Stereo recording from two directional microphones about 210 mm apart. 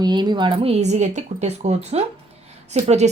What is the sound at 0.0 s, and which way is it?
A woman's voice, 20° right (ahead or behind).